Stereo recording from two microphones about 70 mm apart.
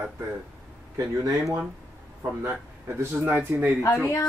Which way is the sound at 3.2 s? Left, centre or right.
Right.